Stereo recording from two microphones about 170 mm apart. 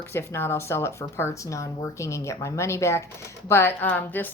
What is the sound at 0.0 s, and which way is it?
Speech, 15° left (ahead or behind).